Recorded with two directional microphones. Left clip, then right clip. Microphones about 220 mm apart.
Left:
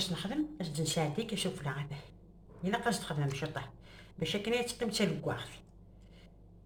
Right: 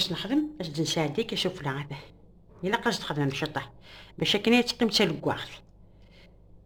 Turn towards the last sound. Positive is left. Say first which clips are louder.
# right 8 dB
turn(degrees=-45)  # may be behind; listen again after turning